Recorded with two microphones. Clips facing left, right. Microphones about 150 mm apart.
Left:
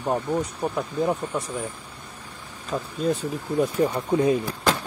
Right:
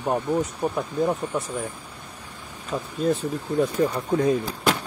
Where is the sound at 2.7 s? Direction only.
Centre (ahead or behind).